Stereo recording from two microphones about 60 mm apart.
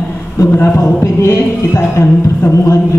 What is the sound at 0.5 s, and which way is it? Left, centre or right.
Speech, left.